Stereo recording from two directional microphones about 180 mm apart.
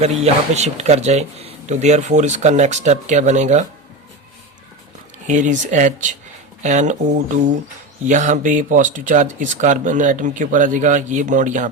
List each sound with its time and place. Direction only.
0.0 s speech: 35° right (ahead or behind)
5.3 s speech: 45° right (ahead or behind)
8.0 s speech: 45° right (ahead or behind)